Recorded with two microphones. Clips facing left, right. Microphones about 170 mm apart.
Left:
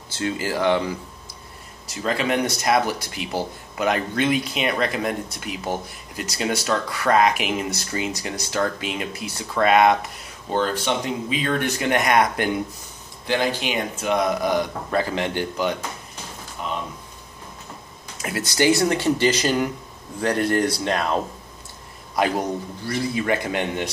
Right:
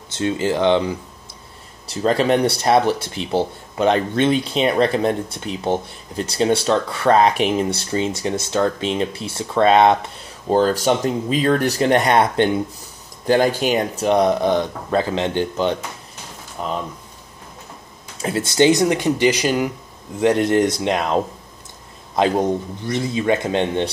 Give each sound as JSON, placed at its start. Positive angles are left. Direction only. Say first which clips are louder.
{"t": 0.1, "sound": "speech", "louder": "right 5 dB", "side_deg": -20}
{"t": 1.9, "sound": "speech", "louder": "right 6 dB", "side_deg": -35}
{"t": 13.3, "sound": "speech", "louder": "right 7 dB", "side_deg": -45}
{"t": 16.6, "sound": "speech", "louder": "right 4 dB", "side_deg": -40}
{"t": 18.1, "sound": "speech", "louder": "right 6 dB", "side_deg": -30}
{"t": 20.2, "sound": "speech", "louder": "right 5 dB", "side_deg": -20}